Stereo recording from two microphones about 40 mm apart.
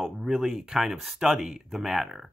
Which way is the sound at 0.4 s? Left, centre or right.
Centre.